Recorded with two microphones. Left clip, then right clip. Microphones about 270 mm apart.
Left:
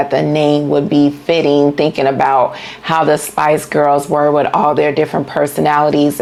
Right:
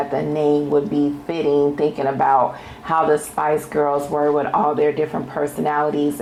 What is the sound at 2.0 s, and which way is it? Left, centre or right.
Speech, left.